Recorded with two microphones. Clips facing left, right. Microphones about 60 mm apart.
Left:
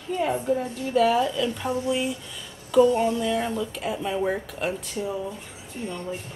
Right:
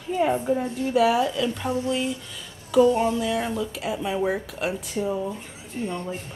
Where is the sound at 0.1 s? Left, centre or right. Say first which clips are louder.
Right 2 dB; centre.